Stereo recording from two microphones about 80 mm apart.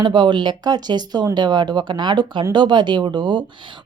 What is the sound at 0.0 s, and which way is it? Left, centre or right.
Speech, right.